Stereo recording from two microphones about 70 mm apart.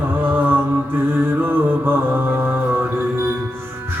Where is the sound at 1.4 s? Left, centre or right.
Right.